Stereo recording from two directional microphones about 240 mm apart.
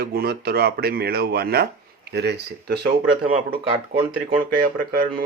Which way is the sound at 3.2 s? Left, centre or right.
Right.